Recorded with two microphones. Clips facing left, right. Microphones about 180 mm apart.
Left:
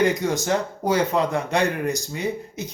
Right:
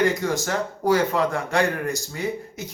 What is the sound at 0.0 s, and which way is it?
Speech, 20° left (ahead or behind).